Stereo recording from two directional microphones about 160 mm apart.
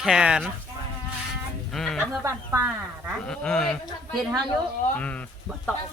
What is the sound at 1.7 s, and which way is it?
Speech, centre (ahead or behind).